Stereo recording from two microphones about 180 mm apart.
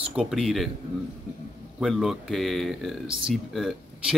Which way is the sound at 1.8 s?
Centre (ahead or behind).